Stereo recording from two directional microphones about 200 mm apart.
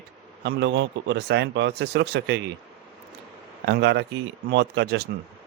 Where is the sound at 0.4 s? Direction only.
60° right (ahead or behind).